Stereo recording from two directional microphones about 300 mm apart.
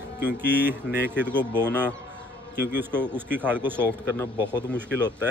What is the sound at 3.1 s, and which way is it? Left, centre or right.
Speech, centre.